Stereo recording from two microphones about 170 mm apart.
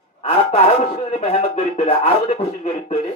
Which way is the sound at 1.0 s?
35° left (ahead or behind).